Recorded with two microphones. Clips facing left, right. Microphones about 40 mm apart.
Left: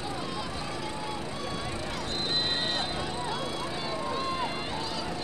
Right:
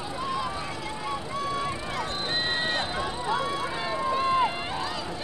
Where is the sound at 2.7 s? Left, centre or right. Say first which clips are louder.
Right 3 dB; right.